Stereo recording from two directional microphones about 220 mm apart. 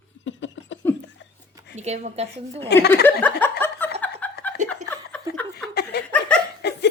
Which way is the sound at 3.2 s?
10° left (ahead or behind).